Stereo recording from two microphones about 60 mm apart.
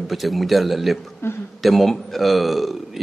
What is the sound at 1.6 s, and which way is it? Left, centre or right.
Speech, centre.